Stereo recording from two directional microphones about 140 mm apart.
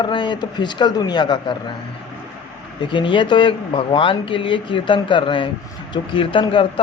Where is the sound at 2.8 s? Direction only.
35° left (ahead or behind).